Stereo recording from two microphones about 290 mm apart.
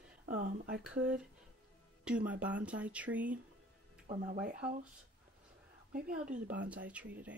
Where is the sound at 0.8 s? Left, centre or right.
Centre.